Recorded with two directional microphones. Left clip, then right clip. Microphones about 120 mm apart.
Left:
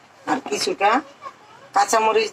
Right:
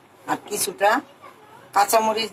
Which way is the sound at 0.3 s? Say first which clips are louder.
Left 4 dB; 20° left (ahead or behind).